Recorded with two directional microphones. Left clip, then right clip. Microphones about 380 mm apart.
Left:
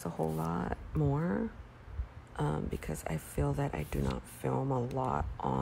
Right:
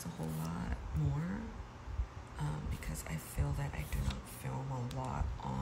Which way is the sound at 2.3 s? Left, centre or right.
Centre.